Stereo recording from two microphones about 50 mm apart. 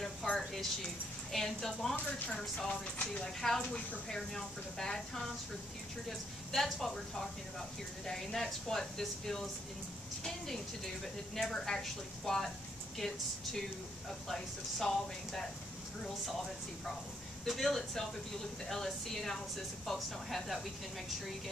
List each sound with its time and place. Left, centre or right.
0.0 s a sound: centre
1.3 s speech: centre
2.0 s speech: left
2.7 s speech: left
17.5 s speech: centre